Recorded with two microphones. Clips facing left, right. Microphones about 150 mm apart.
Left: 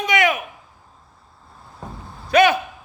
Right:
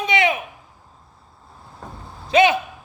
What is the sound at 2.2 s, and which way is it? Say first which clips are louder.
Speech: left 1 dB; 25° right (ahead or behind).